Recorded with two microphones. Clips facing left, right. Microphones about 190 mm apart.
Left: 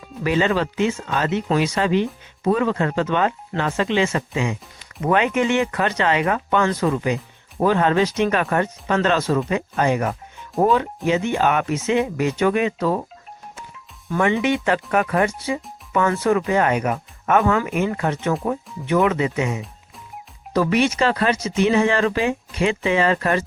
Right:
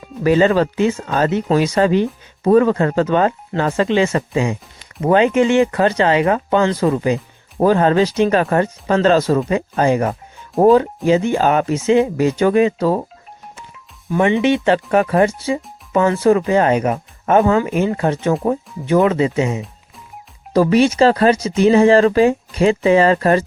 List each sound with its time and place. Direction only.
0.2 s speech: 40° right (ahead or behind)
14.1 s speech: 20° right (ahead or behind); by 23.4 s 35° right (ahead or behind)